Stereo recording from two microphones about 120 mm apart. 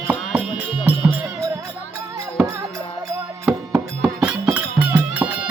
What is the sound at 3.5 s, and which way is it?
Music, 25° right (ahead or behind).